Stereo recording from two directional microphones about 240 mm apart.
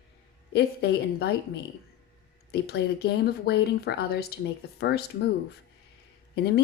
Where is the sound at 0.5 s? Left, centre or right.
Left.